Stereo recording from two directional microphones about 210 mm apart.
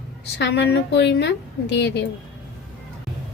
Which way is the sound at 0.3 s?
55° left (ahead or behind).